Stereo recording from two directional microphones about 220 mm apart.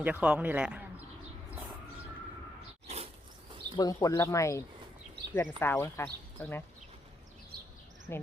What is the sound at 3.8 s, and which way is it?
Speech, 15° left (ahead or behind).